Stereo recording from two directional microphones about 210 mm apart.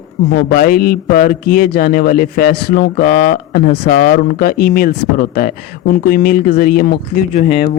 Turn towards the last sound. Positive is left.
turn(degrees=35)  # may be behind; listen again after turning